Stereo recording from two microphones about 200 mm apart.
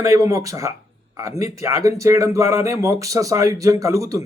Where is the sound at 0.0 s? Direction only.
15° right (ahead or behind).